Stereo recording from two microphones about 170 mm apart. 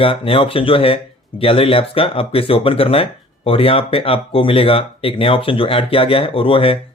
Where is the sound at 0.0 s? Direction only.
35° left (ahead or behind).